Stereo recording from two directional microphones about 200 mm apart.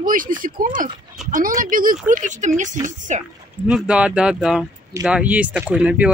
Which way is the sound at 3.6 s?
5° right (ahead or behind).